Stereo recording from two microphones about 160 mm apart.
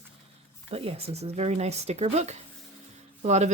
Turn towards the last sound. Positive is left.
turn(degrees=-45)  # may be behind; listen again after turning